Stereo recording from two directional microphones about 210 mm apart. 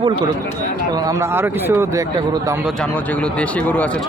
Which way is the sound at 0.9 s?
15° right (ahead or behind).